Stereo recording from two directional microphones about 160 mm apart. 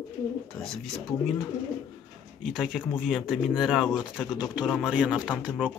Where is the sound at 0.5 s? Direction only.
Centre (ahead or behind).